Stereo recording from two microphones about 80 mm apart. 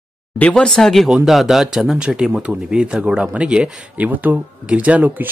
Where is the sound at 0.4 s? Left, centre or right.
Centre.